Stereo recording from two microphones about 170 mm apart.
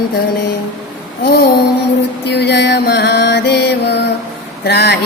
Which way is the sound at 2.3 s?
75° left (ahead or behind).